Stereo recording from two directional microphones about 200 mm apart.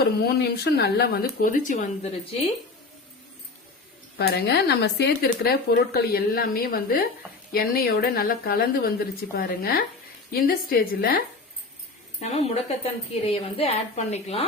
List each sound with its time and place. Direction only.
0.0 s speech: 50° left (ahead or behind); by 2.4 s 35° left (ahead or behind)
4.2 s speech: 55° left (ahead or behind)
12.2 s a woman's voice: 30° left (ahead or behind)